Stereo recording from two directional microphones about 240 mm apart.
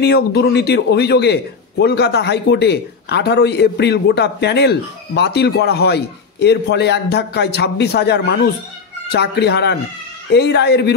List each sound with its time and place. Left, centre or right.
0.0 s a man's voice: left